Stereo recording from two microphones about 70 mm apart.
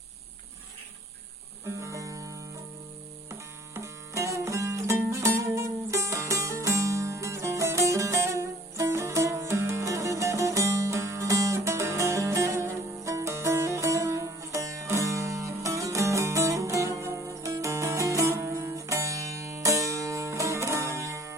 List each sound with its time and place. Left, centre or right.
1.6 s guitar: right
3.8 s music: right